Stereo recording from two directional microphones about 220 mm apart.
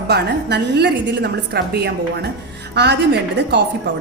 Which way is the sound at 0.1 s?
50° right (ahead or behind).